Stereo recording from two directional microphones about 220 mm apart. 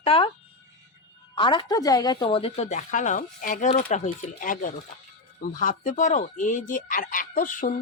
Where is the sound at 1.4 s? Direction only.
20° left (ahead or behind).